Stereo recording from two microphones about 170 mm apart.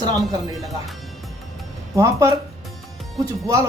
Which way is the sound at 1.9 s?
20° right (ahead or behind).